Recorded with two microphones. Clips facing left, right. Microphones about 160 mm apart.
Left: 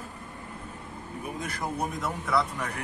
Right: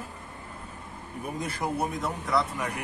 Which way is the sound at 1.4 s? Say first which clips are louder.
Right 3 dB; 25° right (ahead or behind).